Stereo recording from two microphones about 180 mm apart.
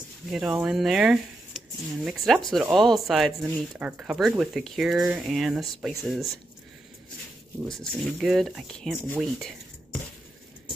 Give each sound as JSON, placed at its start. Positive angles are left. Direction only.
{"t": 0.3, "sound": "speech", "side_deg": 0}
{"t": 7.8, "sound": "speech", "side_deg": 0}